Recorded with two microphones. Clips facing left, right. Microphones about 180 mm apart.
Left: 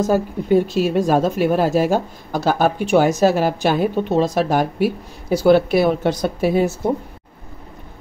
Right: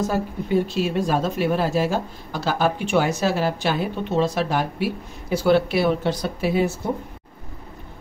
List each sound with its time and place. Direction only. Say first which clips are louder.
0.0 s speech: left 6 dB; 45° left (ahead or behind)